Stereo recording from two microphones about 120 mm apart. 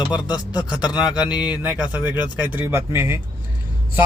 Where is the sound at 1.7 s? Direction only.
15° right (ahead or behind).